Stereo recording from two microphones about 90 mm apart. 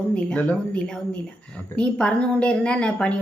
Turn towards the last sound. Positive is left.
turn(degrees=10)  # may be behind; listen again after turning